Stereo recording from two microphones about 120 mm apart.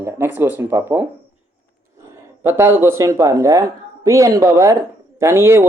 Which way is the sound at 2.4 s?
20° right (ahead or behind).